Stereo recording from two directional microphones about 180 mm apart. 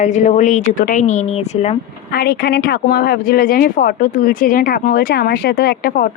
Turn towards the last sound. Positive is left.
turn(degrees=55)  # may be behind; listen again after turning